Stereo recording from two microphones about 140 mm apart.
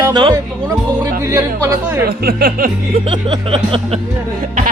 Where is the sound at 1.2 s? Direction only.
20° right (ahead or behind).